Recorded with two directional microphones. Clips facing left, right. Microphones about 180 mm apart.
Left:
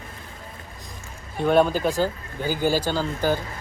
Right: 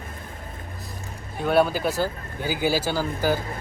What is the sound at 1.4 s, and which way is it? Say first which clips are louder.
Speech: left 2 dB; 5° right (ahead or behind).